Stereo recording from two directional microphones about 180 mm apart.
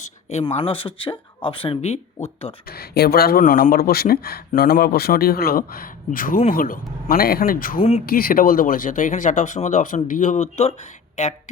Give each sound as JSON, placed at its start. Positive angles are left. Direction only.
{"t": 0.0, "sound": "a sound", "side_deg": 40}
{"t": 0.6, "sound": "speech", "side_deg": 30}
{"t": 2.6, "sound": "speech", "side_deg": 60}
{"t": 7.8, "sound": "speech", "side_deg": 40}
{"t": 8.0, "sound": "speech", "side_deg": 55}